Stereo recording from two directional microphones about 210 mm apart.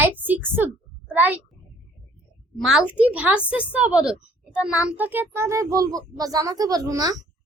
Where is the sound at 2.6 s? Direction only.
Centre (ahead or behind).